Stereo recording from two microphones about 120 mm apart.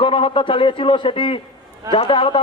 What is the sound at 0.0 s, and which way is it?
A man's voice, 45° left (ahead or behind).